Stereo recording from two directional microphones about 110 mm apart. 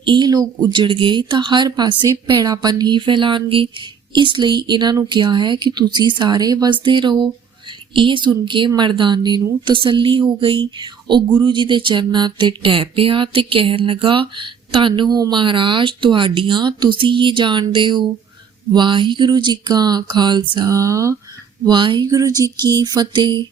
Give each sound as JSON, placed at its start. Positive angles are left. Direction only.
{"t": 0.0, "sound": "speech", "side_deg": -45}
{"t": 20.7, "sound": "speech", "side_deg": -30}
{"t": 21.7, "sound": "speech", "side_deg": -45}